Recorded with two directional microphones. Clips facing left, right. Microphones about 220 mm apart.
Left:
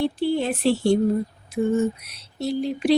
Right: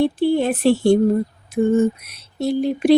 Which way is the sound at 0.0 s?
55° right (ahead or behind).